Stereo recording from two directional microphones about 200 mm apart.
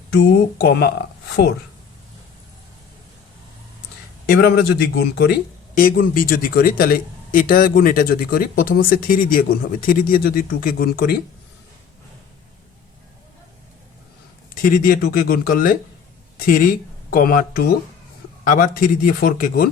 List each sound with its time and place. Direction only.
0.1 s speech: 55° left (ahead or behind)
4.3 s speech: 50° left (ahead or behind)
14.5 s speech: 45° left (ahead or behind)
17.1 s speech: 45° left (ahead or behind)